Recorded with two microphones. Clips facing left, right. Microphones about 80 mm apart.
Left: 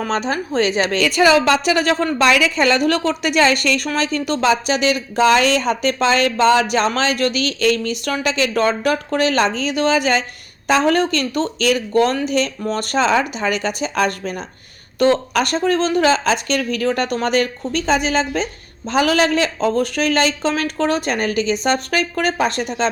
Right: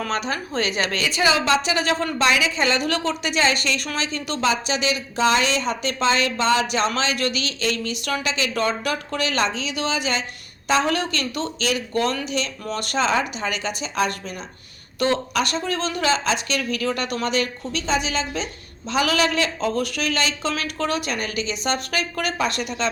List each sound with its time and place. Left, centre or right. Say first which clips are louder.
0.0 s speech: left 5 dB; left
1.0 s speech: left 7 dB; left